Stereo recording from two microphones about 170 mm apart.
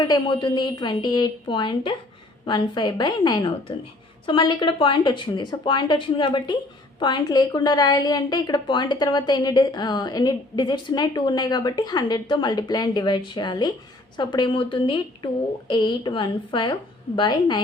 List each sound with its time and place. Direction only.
0.0 s a woman's voice: 25° left (ahead or behind)